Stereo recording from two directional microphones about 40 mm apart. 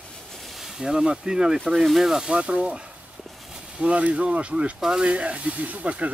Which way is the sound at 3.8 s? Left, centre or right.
Right.